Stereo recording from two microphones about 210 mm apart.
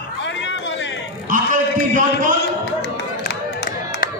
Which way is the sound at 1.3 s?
40° right (ahead or behind).